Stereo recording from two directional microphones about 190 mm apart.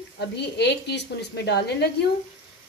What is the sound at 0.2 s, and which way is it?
Speech, 60° left (ahead or behind).